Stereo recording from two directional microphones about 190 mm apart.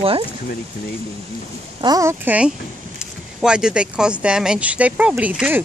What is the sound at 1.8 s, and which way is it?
Speech, 20° right (ahead or behind).